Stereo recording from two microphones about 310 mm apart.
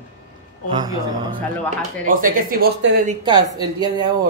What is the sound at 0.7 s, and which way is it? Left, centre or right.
Speech, centre.